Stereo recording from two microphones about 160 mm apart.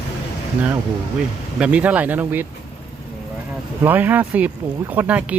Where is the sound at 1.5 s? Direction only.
5° right (ahead or behind).